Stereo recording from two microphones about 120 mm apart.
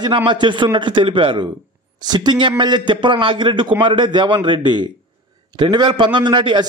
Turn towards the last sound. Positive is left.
turn(degrees=-40)  # may be behind; listen again after turning